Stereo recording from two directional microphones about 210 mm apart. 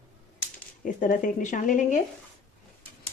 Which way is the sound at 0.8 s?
40° left (ahead or behind).